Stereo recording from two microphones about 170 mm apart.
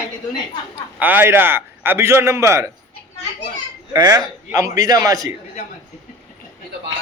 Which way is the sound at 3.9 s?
25° right (ahead or behind).